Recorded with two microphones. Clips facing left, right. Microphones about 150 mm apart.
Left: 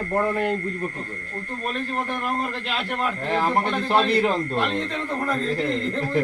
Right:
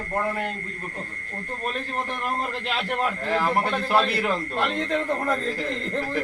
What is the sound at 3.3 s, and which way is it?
Speech, 20° left (ahead or behind).